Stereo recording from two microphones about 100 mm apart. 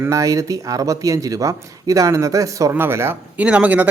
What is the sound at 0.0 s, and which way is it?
Speech, 30° right (ahead or behind).